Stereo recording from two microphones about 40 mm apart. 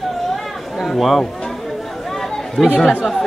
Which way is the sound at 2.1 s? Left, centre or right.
Centre.